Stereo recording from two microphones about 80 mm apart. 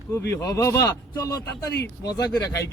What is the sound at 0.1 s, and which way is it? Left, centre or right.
Speech, left.